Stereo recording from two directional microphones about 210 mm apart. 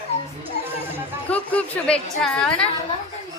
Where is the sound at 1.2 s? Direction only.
5° left (ahead or behind).